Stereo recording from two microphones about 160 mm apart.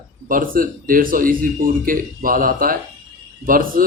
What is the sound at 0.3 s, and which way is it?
A man's voice, 60° right (ahead or behind).